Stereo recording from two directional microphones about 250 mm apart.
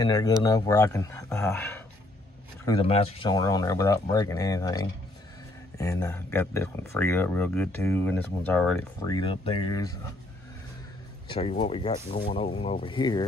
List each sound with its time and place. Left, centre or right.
0.0 s speech: centre
2.6 s speech: centre
9.0 s speech: centre
11.2 s speech: left